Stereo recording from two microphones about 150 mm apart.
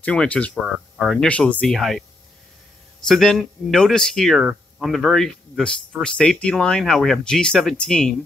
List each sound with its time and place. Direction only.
0.0 s speech: 10° left (ahead or behind)
0.6 s speech: 5° right (ahead or behind)
3.1 s speech: centre (ahead or behind)